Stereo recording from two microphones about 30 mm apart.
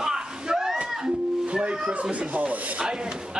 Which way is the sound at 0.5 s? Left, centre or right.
Centre.